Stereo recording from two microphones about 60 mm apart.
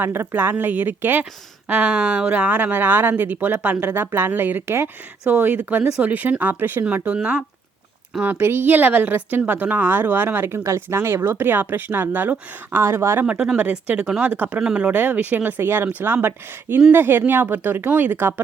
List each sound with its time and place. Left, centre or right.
0.0 s speech: right
5.3 s speech: right
8.2 s speech: right
12.8 s speech: right
13.6 s speech: right